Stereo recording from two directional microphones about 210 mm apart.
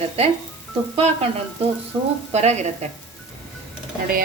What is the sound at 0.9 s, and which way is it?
Frying, 30° right (ahead or behind).